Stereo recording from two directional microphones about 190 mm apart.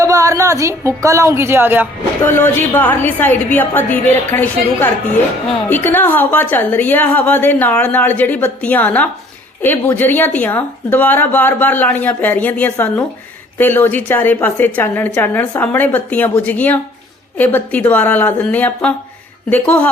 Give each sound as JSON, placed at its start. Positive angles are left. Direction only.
{"t": 0.0, "sound": "a woman's voice", "side_deg": -15}
{"t": 2.2, "sound": "a woman's voice", "side_deg": 10}